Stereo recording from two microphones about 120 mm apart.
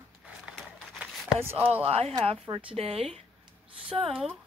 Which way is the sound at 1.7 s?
55° right (ahead or behind).